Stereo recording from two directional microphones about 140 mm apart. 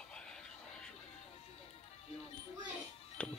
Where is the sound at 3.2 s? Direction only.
5° left (ahead or behind).